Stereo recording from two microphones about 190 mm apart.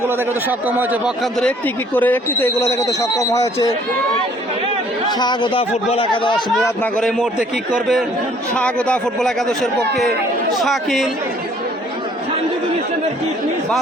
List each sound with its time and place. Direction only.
0.0 s a man's voice: 10° right (ahead or behind); by 3.8 s 15° left (ahead or behind)
5.2 s a man's voice: 25° left (ahead or behind)
6.9 s a man's voice: centre (ahead or behind)